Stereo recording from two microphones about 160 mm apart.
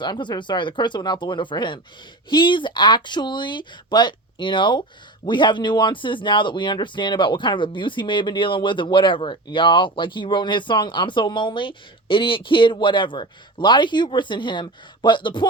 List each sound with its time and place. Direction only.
0.0 s speech: 30° left (ahead or behind)